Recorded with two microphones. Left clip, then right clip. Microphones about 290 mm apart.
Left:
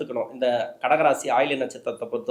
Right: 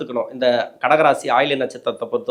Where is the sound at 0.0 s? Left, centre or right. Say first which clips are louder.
Right 5 dB; right.